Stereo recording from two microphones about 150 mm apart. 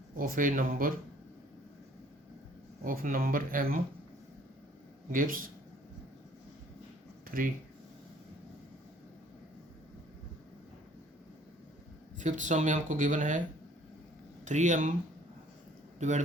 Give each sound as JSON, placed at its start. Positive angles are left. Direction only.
{"t": 0.2, "sound": "speech", "side_deg": -65}
{"t": 2.8, "sound": "speech", "side_deg": -70}
{"t": 5.1, "sound": "speech", "side_deg": -65}
{"t": 7.3, "sound": "speech", "side_deg": -70}
{"t": 12.2, "sound": "speech", "side_deg": -55}
{"t": 14.4, "sound": "speech", "side_deg": -55}
{"t": 16.0, "sound": "a man's voice", "side_deg": -55}